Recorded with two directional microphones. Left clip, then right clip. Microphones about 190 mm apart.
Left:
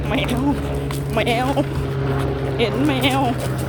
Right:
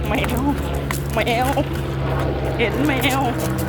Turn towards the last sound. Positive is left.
turn(degrees=20)  # may be behind; listen again after turning